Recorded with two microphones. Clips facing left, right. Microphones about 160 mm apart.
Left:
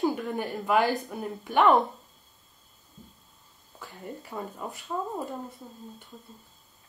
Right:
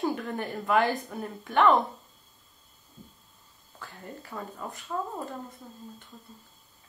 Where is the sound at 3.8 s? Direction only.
15° left (ahead or behind).